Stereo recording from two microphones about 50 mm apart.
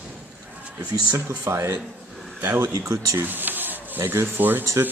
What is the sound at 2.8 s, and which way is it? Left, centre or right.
Speech, right.